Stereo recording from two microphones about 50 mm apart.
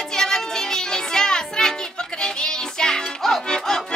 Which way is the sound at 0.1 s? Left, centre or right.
Centre.